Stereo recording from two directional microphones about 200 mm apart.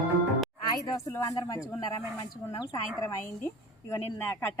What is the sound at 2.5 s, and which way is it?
A woman's voice, 20° left (ahead or behind).